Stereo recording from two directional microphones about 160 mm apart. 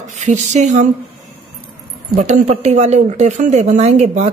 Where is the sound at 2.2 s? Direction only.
45° right (ahead or behind).